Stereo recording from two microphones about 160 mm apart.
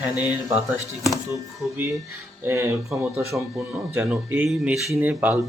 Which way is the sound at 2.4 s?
15° right (ahead or behind).